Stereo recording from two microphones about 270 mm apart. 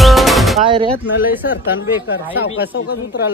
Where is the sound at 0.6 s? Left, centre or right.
Centre.